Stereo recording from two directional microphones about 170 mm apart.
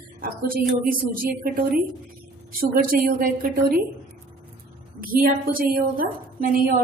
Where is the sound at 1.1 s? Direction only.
60° right (ahead or behind).